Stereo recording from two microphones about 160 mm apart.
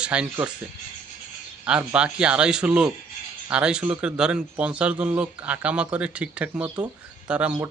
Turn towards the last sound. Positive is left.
turn(degrees=-10)  # may be behind; listen again after turning